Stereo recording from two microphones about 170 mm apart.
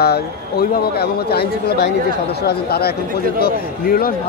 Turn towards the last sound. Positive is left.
turn(degrees=60)  # may be behind; listen again after turning